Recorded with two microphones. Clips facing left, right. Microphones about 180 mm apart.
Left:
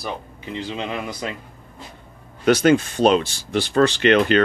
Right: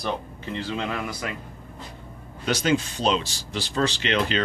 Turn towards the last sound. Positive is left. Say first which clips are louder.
# left 9 dB
turn(degrees=60)  # may be behind; listen again after turning